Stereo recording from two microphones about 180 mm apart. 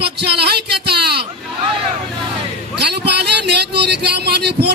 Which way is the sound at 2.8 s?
70° right (ahead or behind).